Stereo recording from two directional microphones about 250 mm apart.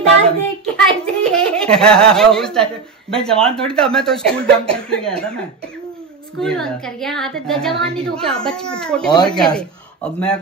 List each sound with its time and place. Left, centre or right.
0.7 s giggle: centre
3.3 s speech: centre
9.1 s speech: centre
9.4 s speech: centre